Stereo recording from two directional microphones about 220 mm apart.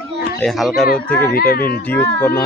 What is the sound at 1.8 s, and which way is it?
Speech, 10° left (ahead or behind).